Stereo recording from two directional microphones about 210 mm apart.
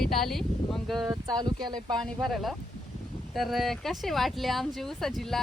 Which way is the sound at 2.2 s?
Centre (ahead or behind).